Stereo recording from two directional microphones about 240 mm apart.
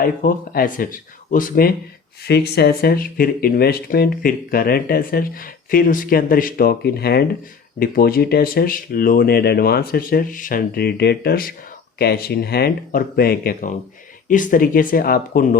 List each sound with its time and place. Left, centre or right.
0.0 s speech: left